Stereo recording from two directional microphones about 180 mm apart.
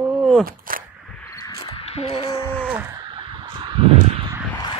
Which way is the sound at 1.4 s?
25° left (ahead or behind).